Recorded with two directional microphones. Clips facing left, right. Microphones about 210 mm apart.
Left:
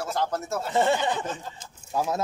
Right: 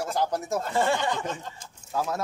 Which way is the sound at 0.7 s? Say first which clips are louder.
Left 3 dB; 20° left (ahead or behind).